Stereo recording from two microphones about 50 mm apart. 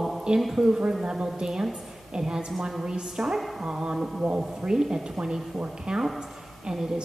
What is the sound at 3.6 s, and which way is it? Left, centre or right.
A woman's voice, centre.